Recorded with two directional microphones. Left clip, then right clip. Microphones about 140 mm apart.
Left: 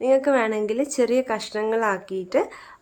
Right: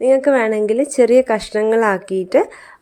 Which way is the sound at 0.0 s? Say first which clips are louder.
Right 6 dB; 35° right (ahead or behind).